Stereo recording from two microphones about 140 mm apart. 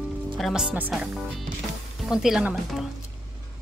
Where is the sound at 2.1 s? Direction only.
5° right (ahead or behind).